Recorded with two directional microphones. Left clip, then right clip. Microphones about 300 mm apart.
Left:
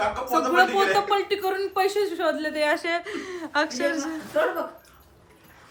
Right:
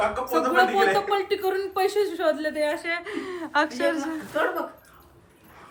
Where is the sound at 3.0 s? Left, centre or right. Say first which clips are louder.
Right 1 dB; centre.